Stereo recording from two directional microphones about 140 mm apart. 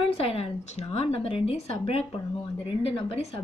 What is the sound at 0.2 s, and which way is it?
A woman's voice, 45° left (ahead or behind).